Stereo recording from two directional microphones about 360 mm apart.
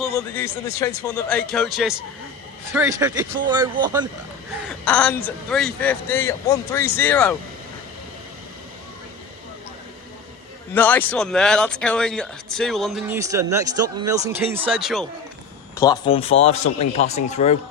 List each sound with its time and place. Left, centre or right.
0.0 s speech: centre
4.9 s speech: centre
10.8 s speech: centre
15.7 s a man's voice: centre